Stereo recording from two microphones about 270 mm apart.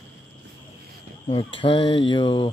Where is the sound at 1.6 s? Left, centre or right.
Centre.